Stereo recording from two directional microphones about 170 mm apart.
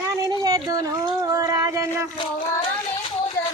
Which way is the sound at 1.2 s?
20° right (ahead or behind).